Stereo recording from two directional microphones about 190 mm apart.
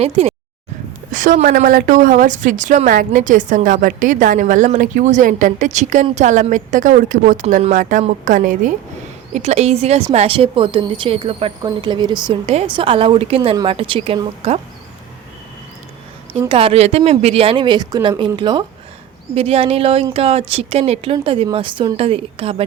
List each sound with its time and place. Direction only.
0.0 s a woman's voice: 35° right (ahead or behind)
16.5 s a woman's voice: 30° right (ahead or behind)